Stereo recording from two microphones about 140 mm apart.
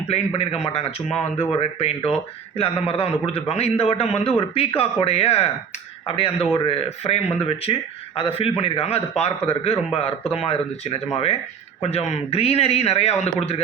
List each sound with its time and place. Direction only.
0.1 s speech: 50° left (ahead or behind)
2.0 s speech: 45° left (ahead or behind)